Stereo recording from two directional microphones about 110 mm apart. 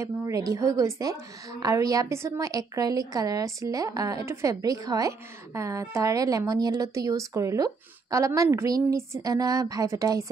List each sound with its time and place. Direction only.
0.0 s a woman's voice: 30° right (ahead or behind)